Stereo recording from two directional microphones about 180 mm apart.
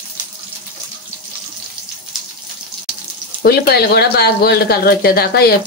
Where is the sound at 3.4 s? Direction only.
60° left (ahead or behind).